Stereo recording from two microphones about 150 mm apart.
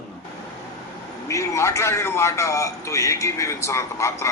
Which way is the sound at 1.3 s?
20° left (ahead or behind).